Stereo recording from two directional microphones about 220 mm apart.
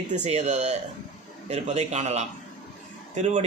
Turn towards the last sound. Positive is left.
turn(degrees=-30)  # may be behind; listen again after turning